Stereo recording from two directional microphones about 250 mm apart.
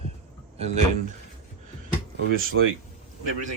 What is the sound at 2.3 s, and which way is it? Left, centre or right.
Speech, right.